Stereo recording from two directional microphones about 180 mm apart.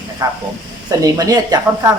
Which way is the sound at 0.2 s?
20° right (ahead or behind).